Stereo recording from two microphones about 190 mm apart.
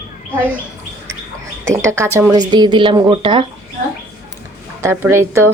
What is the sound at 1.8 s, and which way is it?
Speech, 15° right (ahead or behind).